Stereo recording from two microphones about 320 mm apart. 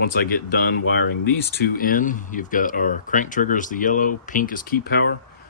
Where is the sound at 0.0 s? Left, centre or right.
Left.